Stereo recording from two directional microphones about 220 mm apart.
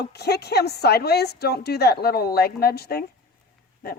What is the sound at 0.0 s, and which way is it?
A woman's voice, 45° left (ahead or behind).